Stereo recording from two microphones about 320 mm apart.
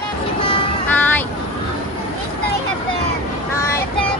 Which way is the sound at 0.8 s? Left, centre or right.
Centre.